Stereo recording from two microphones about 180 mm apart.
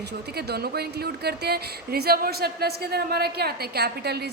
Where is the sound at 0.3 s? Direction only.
60° right (ahead or behind).